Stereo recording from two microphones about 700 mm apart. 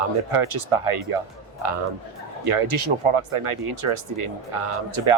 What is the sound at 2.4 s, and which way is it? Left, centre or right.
Speech, right.